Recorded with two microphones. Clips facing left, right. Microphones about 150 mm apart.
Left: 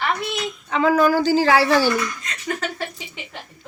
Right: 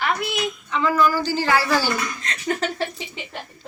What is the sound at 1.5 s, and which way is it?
Speech, 30° left (ahead or behind).